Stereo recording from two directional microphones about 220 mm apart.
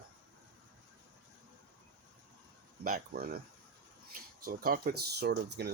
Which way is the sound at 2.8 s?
40° right (ahead or behind).